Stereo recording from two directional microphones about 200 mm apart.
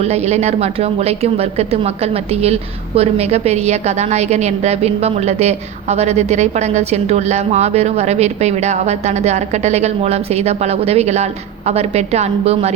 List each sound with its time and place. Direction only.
0.0 s speech: 35° right (ahead or behind)